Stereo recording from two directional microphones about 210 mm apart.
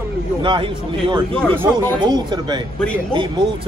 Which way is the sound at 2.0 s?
20° right (ahead or behind).